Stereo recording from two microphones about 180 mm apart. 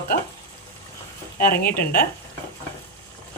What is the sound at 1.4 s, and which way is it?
Speech, 50° left (ahead or behind).